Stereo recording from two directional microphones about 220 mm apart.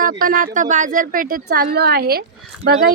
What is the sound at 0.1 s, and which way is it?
A woman's voice, 40° right (ahead or behind).